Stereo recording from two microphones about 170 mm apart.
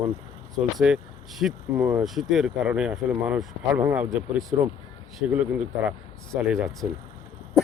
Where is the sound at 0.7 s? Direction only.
5° right (ahead or behind).